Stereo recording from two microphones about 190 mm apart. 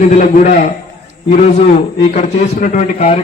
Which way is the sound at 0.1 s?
40° left (ahead or behind).